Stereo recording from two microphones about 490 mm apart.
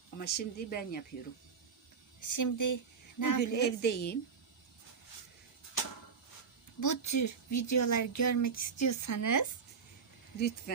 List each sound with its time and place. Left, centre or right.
0.2 s speech: centre
2.2 s speech: left
3.8 s a woman's voice: centre
6.7 s speech: left